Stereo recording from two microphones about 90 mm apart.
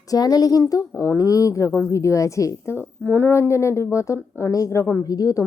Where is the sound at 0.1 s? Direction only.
45° left (ahead or behind).